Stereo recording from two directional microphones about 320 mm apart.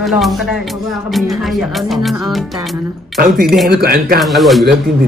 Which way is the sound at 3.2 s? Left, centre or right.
Right.